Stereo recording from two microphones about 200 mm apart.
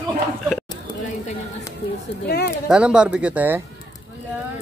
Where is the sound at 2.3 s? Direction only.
50° left (ahead or behind).